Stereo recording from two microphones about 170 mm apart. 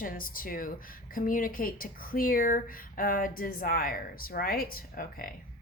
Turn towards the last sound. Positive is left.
turn(degrees=60)  # may be behind; listen again after turning